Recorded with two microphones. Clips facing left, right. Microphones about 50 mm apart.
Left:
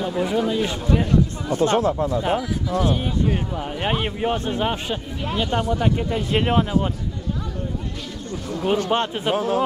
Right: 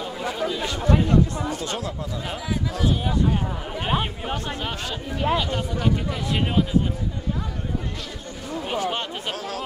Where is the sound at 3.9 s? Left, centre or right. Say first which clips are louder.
Left 3 dB; centre; by 6.8 s left.